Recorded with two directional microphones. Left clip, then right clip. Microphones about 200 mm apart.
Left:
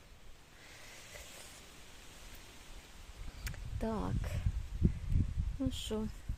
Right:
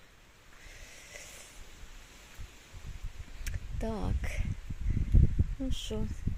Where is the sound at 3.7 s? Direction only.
5° right (ahead or behind).